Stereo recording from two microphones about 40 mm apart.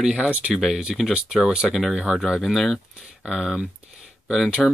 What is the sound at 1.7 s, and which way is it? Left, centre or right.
Speech, centre.